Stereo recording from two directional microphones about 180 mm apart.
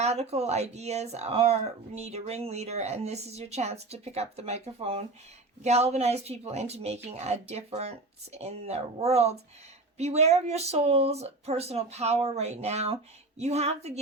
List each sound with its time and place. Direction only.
0.0 s speech: 35° right (ahead or behind)